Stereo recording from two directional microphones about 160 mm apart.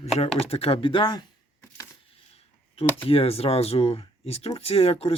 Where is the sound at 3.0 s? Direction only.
35° left (ahead or behind).